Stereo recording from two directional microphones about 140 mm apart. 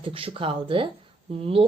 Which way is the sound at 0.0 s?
40° right (ahead or behind).